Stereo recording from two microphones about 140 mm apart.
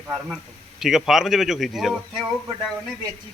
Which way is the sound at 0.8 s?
Centre (ahead or behind).